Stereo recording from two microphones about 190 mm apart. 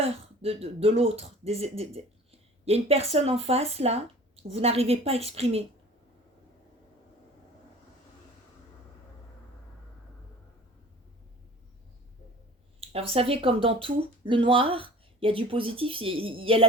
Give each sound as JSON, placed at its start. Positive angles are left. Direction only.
{"t": 0.0, "sound": "speech", "side_deg": -30}
{"t": 12.8, "sound": "speech", "side_deg": -30}